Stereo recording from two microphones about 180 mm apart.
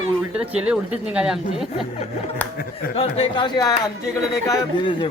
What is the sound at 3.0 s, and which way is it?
A man's voice, 35° left (ahead or behind).